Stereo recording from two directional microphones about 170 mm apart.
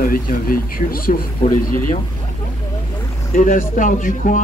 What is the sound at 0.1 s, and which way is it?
Speech, 55° left (ahead or behind).